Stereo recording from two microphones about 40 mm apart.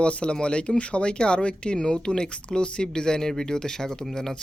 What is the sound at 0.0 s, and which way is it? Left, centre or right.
Speech, left.